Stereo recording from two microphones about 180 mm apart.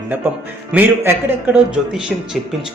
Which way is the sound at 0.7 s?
10° right (ahead or behind).